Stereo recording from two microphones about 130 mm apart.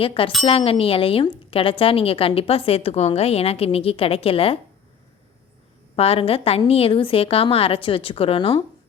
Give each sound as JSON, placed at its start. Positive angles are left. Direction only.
{"t": 0.0, "sound": "speech", "side_deg": 45}
{"t": 6.0, "sound": "speech", "side_deg": 50}